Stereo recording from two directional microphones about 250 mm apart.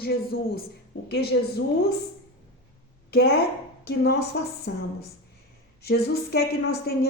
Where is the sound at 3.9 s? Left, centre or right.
Left.